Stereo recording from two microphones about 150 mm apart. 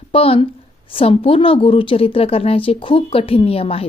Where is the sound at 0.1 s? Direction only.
40° left (ahead or behind).